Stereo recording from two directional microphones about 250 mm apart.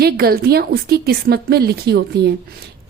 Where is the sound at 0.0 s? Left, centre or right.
Right.